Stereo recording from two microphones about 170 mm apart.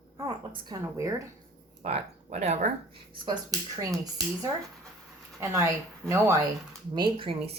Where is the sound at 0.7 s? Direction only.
20° right (ahead or behind).